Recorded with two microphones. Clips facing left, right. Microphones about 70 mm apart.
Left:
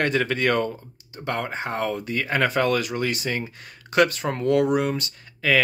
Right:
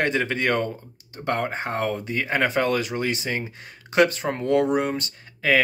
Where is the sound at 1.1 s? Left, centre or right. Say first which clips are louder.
Right 2 dB; right.